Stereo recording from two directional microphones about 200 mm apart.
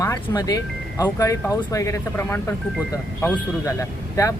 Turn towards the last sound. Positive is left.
turn(degrees=15)  # may be behind; listen again after turning